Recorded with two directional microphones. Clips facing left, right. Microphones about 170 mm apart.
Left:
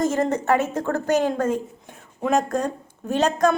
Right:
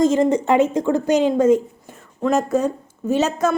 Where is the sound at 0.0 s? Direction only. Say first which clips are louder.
Right 5 dB; 15° right (ahead or behind).